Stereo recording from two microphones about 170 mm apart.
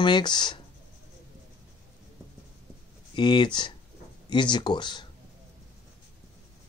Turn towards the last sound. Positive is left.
turn(degrees=25)  # may be behind; listen again after turning